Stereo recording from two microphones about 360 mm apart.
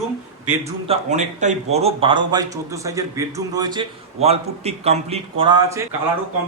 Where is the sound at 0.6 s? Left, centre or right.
Centre.